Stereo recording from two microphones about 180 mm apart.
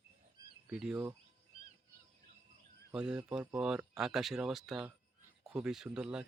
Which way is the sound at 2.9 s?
5° right (ahead or behind).